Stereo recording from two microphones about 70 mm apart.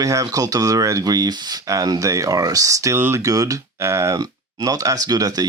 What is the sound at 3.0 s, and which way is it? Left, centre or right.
Speech, right.